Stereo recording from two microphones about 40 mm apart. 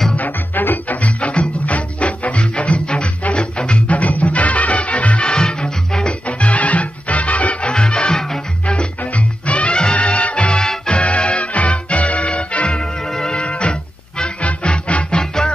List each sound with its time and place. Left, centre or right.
0.1 s music: left
1.0 s music: left
5.3 s music: left
6.2 s music: left
7.7 s music: left
13.0 s music: centre
13.3 s music: left